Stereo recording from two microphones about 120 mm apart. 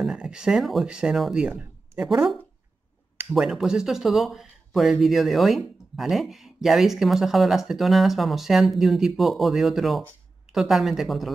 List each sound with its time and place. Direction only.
0.0 s speech: 5° right (ahead or behind)
3.3 s speech: 5° right (ahead or behind)